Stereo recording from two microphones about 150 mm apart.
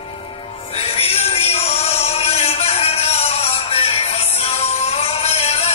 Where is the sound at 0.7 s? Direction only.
40° left (ahead or behind).